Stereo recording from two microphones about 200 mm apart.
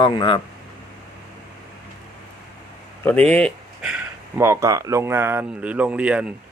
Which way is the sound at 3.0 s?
10° left (ahead or behind).